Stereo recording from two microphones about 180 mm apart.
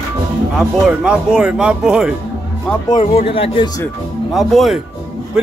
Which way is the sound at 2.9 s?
30° left (ahead or behind).